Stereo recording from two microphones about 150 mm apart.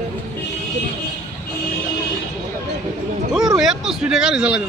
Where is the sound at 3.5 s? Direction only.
Centre (ahead or behind).